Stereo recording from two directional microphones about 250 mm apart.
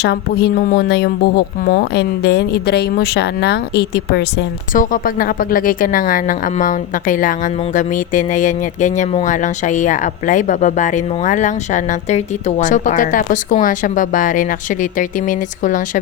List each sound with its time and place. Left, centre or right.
0.0 s speech: left